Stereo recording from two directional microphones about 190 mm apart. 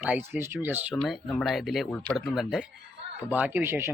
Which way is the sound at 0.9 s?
Centre (ahead or behind).